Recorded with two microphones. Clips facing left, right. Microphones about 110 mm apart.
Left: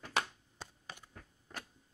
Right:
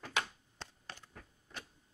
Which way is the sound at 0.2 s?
10° left (ahead or behind).